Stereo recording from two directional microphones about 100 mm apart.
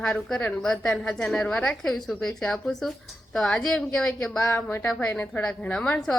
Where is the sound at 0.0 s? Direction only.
5° left (ahead or behind).